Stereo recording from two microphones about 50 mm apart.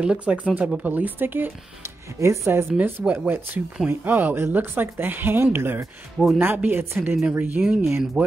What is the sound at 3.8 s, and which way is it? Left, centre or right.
A woman's voice, right.